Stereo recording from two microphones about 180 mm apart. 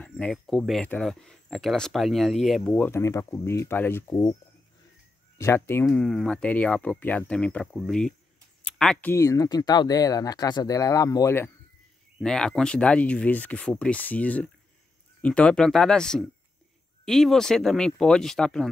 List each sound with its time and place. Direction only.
0.0 s speech: 5° left (ahead or behind)
5.4 s speech: 15° left (ahead or behind)
5.9 s speech: 5° left (ahead or behind)
9.1 s speech: 15° left (ahead or behind)
12.2 s speech: 5° left (ahead or behind)